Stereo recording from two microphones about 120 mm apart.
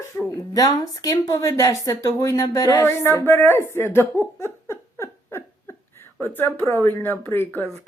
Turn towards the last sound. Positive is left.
turn(degrees=15)  # may be behind; listen again after turning